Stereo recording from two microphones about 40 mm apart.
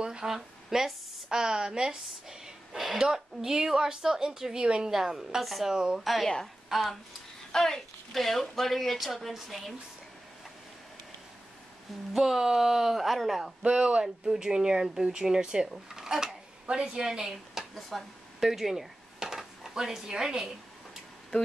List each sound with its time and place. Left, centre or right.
0.0 s a sound: centre
0.3 s speech: centre
2.7 s speech: centre
5.7 s speech: centre
5.9 s a woman's voice: centre
12.1 s speech: centre
13.6 s speech: right
15.9 s a sound: centre
16.6 s speech: right
17.7 s speech: centre